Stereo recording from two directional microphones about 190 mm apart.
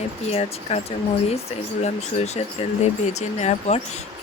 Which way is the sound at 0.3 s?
35° left (ahead or behind).